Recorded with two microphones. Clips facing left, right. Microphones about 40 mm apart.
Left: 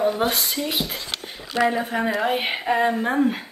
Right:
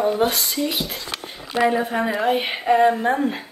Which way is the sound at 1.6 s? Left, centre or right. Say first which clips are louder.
Right 2 dB; centre.